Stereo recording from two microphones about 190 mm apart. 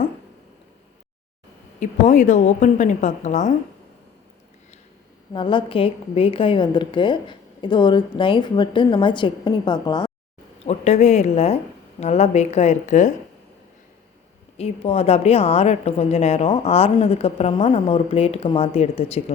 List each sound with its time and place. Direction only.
1.8 s a woman's voice: 40° left (ahead or behind)
5.3 s a woman's voice: 25° left (ahead or behind)
10.7 s a woman's voice: 35° left (ahead or behind)
14.6 s a woman's voice: 35° left (ahead or behind)